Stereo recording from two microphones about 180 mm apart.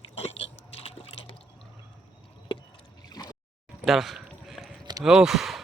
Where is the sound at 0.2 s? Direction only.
35° left (ahead or behind).